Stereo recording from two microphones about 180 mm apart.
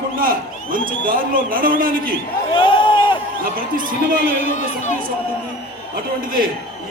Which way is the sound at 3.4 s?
50° right (ahead or behind).